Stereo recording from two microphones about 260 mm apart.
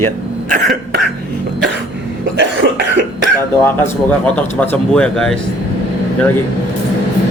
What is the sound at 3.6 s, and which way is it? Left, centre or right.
A man's voice, centre.